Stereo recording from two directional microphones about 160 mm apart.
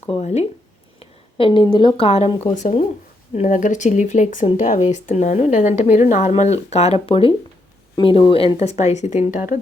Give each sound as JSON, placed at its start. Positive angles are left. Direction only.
{"t": 0.0, "sound": "speech", "side_deg": 45}
{"t": 0.9, "sound": "a sound", "side_deg": 30}
{"t": 2.0, "sound": "speech", "side_deg": 40}
{"t": 8.8, "sound": "speech", "side_deg": 45}